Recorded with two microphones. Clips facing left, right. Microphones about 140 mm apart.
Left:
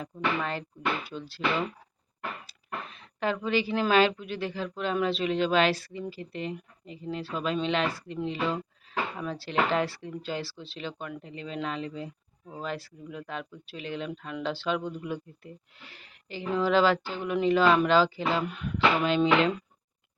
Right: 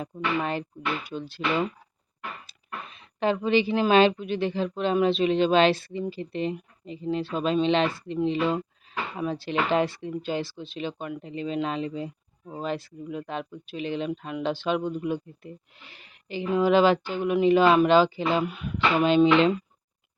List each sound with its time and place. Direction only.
0.0 s speech: 20° right (ahead or behind)
2.5 s speech: 20° right (ahead or behind)
19.0 s speech: 20° right (ahead or behind)